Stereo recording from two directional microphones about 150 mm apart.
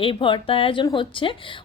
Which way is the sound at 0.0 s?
35° left (ahead or behind).